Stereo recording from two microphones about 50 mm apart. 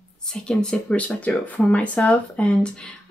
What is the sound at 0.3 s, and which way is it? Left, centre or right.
Speech, centre.